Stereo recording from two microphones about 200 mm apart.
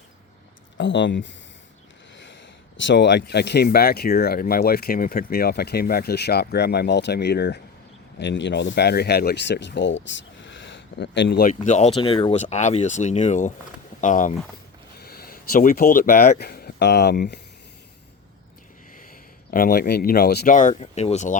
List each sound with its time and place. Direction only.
0.8 s speech: 65° left (ahead or behind)
2.7 s speech: 65° left (ahead or behind)
11.6 s speech: 35° left (ahead or behind)
14.9 s speech: 50° left (ahead or behind)
19.5 s speech: 45° left (ahead or behind)